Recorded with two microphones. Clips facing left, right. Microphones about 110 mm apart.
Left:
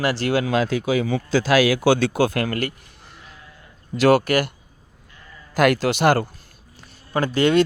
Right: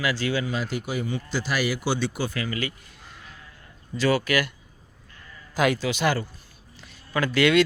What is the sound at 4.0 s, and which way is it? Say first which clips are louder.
Speech: left 6 dB; 75° left (ahead or behind).